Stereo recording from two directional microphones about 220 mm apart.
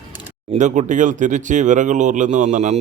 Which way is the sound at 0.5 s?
35° right (ahead or behind).